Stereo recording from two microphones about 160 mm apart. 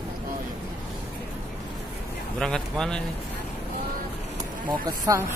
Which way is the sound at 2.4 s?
5° left (ahead or behind).